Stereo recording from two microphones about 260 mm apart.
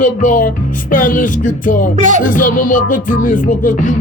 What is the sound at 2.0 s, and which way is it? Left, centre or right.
Music, right.